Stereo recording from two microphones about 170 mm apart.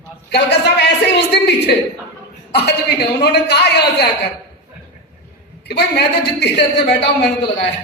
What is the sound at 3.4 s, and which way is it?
Speech, 75° left (ahead or behind).